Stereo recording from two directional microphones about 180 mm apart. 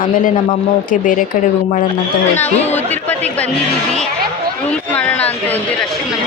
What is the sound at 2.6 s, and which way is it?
Speech, 40° left (ahead or behind).